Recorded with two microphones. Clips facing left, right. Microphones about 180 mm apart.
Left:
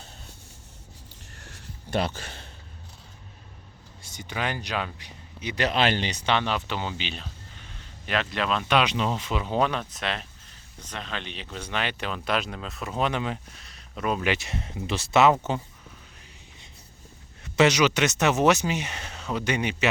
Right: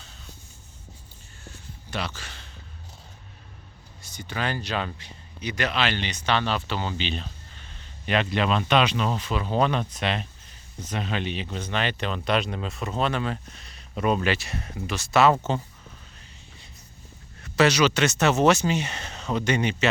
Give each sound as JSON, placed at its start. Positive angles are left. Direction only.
{"t": 1.9, "sound": "speech", "side_deg": 50}
{"t": 4.0, "sound": "speech", "side_deg": 20}
{"t": 5.6, "sound": "speech", "side_deg": 35}
{"t": 6.3, "sound": "speech", "side_deg": 15}
{"t": 9.6, "sound": "speech", "side_deg": 5}
{"t": 11.6, "sound": "speech", "side_deg": 10}
{"t": 13.6, "sound": "a sound", "side_deg": 0}
{"t": 14.3, "sound": "speech", "side_deg": 20}
{"t": 17.4, "sound": "speech", "side_deg": 20}